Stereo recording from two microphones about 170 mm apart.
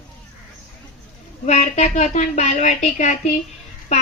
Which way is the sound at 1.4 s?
40° left (ahead or behind).